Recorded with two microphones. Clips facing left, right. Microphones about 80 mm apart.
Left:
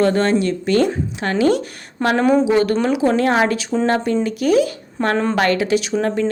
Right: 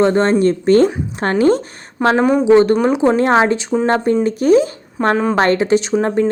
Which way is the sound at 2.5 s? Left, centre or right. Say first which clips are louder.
Right 5 dB; right.